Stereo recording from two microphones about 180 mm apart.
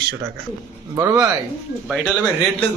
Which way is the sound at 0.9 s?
20° right (ahead or behind).